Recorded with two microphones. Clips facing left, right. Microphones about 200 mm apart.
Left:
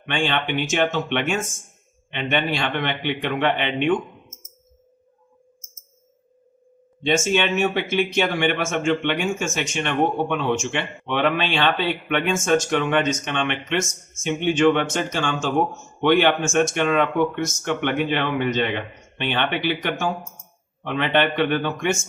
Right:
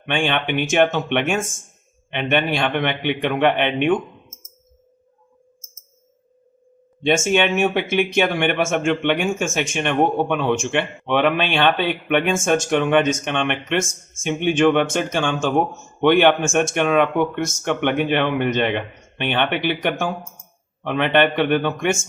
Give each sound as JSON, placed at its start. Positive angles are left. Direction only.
{"t": 0.1, "sound": "speech", "side_deg": -55}
{"t": 7.3, "sound": "speech", "side_deg": -55}